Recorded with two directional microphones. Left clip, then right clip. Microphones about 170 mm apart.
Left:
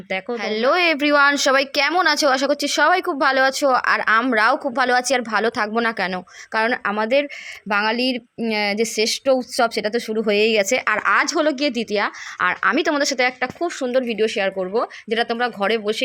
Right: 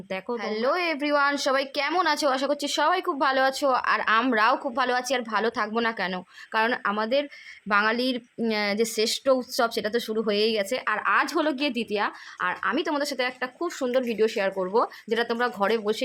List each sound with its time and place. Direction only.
0.3 s a woman's voice: 20° left (ahead or behind)